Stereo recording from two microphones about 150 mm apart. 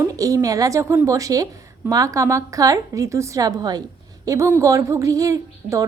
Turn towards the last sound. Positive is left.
turn(degrees=-20)  # may be behind; listen again after turning